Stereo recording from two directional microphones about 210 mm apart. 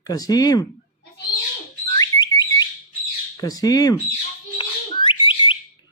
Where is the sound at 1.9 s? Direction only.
20° left (ahead or behind).